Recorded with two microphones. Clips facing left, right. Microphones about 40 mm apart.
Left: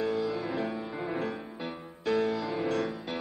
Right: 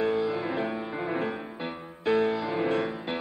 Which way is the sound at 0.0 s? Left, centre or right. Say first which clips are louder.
Right 3 dB; right.